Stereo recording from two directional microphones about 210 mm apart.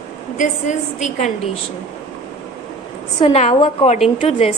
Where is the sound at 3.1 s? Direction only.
25° left (ahead or behind).